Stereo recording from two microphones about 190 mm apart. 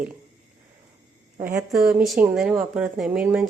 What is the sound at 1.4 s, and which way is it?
Speech, 5° right (ahead or behind).